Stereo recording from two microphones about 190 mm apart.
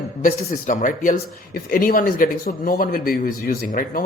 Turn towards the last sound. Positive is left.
turn(degrees=45)  # may be behind; listen again after turning